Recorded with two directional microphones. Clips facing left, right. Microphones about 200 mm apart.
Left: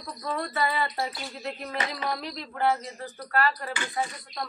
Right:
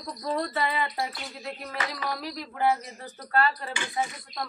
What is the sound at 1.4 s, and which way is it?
Speech, centre (ahead or behind).